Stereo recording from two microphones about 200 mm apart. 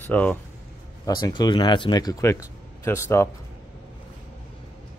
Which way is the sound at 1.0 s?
20° left (ahead or behind).